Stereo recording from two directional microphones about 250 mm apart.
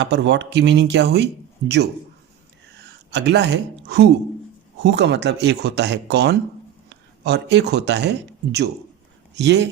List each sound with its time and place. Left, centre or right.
0.0 s speech: right
3.1 s speech: right
9.3 s speech: right